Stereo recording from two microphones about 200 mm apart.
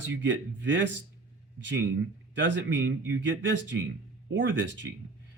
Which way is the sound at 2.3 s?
65° right (ahead or behind).